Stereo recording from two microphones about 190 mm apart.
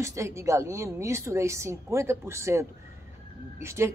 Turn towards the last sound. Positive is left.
turn(degrees=-15)  # may be behind; listen again after turning